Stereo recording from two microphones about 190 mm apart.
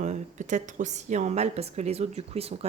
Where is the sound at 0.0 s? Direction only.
40° right (ahead or behind).